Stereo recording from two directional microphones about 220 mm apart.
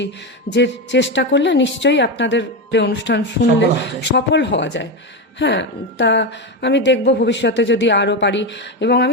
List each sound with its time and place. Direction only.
0.5 s a woman's voice: 55° left (ahead or behind)